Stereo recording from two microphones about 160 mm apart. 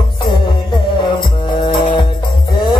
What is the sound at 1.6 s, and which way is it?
Music, 30° left (ahead or behind).